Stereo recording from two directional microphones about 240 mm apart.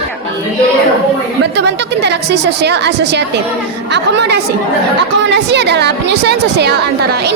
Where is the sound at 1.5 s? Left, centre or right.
Right.